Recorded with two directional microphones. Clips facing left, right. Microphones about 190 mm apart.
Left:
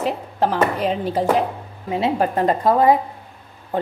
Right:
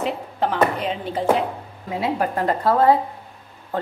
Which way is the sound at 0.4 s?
40° left (ahead or behind).